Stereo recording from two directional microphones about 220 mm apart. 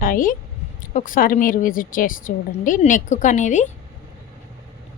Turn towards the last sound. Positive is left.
turn(degrees=35)  # may be behind; listen again after turning